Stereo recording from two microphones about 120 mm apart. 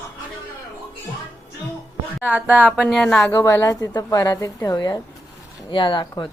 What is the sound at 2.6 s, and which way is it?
Speech, 5° left (ahead or behind).